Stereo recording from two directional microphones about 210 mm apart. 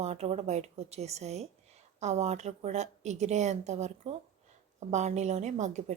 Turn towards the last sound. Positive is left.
turn(degrees=-35)  # may be behind; listen again after turning